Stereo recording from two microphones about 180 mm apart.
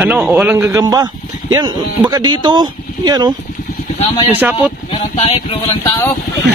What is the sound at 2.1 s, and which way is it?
Speech, 25° right (ahead or behind).